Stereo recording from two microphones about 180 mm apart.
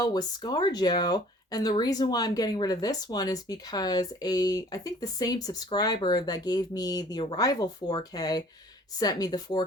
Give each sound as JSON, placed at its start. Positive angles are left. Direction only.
{"t": 0.0, "sound": "speech", "side_deg": 20}